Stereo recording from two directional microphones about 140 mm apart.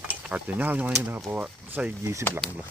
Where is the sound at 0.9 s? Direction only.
20° right (ahead or behind).